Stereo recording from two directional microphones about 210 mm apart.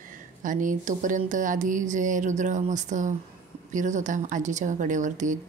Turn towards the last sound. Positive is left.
turn(degrees=-35)  # may be behind; listen again after turning